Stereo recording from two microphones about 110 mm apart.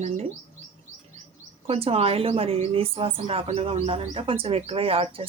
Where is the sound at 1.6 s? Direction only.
60° right (ahead or behind).